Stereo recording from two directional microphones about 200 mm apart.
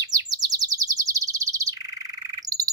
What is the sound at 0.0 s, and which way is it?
Chirp, 20° right (ahead or behind).